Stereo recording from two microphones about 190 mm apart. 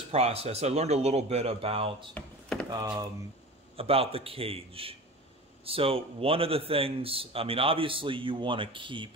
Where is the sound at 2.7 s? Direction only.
20° right (ahead or behind).